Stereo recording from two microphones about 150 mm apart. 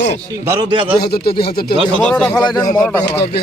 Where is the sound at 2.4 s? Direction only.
30° left (ahead or behind).